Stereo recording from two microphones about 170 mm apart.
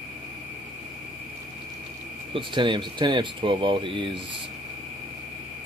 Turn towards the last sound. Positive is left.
turn(degrees=-30)  # may be behind; listen again after turning